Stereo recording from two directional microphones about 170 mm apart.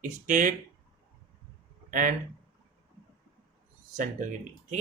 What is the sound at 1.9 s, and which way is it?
Speech, 50° right (ahead or behind).